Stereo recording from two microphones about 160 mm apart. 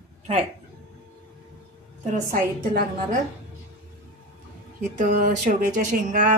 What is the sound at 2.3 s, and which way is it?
Speech, 60° right (ahead or behind).